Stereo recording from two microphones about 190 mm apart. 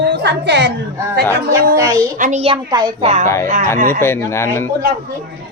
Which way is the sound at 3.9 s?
10° left (ahead or behind).